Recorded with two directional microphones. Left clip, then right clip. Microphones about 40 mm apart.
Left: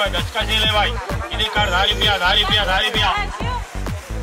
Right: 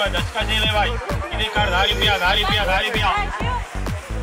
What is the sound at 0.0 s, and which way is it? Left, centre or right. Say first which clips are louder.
Speech: left 1 dB; centre.